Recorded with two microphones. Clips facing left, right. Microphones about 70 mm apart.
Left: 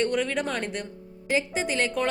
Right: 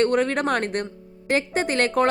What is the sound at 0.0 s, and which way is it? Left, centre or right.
A woman's voice, right.